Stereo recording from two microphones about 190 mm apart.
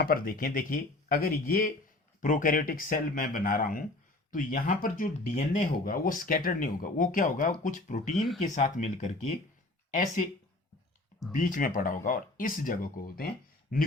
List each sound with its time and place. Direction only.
0.0 s speech: 50° left (ahead or behind)
11.3 s speech: 45° left (ahead or behind)